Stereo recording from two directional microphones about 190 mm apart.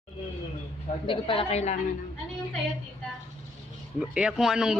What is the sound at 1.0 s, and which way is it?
Speech, 30° left (ahead or behind).